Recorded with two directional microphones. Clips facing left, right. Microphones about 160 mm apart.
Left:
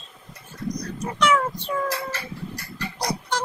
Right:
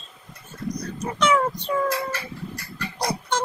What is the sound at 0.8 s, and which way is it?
Cat, 20° right (ahead or behind).